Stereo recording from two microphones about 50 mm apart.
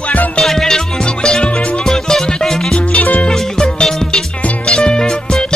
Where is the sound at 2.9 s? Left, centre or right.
Left.